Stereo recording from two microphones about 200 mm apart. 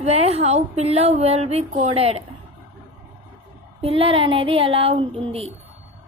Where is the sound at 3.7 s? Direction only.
30° right (ahead or behind).